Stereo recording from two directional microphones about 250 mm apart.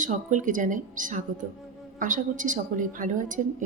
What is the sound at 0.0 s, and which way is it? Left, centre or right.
A woman's voice, right.